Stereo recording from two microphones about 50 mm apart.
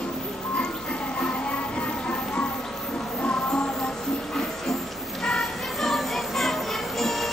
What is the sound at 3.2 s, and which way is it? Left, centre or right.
Music, left.